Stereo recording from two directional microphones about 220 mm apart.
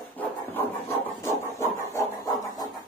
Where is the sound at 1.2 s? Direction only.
15° left (ahead or behind).